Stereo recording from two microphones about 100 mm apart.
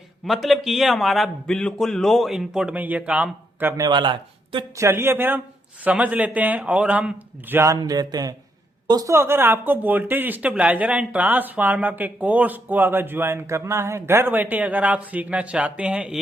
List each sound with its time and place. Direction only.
0.3 s a man's voice: centre (ahead or behind)
2.7 s speech: 15° right (ahead or behind)
3.8 s speech: 45° right (ahead or behind)
4.8 s speech: 25° right (ahead or behind)
7.7 s speech: 40° right (ahead or behind); by 16.2 s 10° right (ahead or behind)